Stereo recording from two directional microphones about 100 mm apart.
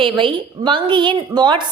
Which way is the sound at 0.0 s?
60° right (ahead or behind).